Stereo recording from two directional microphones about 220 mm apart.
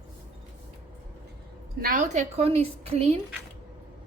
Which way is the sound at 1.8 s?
40° right (ahead or behind).